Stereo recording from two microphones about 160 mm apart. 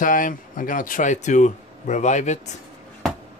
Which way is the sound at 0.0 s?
55° left (ahead or behind).